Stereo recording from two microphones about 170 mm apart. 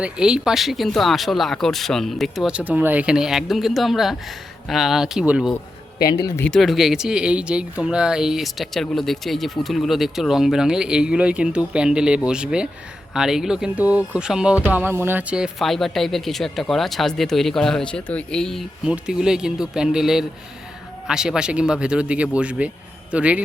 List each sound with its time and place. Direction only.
0.0 s speech: 5° right (ahead or behind)
6.0 s speech: 65° left (ahead or behind)
6.4 s speech: centre (ahead or behind)